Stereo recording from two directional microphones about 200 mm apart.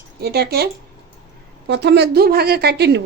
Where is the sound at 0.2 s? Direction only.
55° right (ahead or behind).